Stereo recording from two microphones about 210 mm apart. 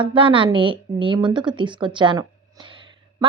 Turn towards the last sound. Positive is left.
turn(degrees=-25)  # may be behind; listen again after turning